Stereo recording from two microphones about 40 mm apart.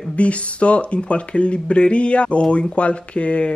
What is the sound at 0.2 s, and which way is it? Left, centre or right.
Speech, left.